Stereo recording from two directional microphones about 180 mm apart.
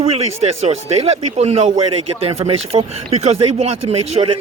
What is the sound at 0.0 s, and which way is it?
A man's voice, 35° right (ahead or behind).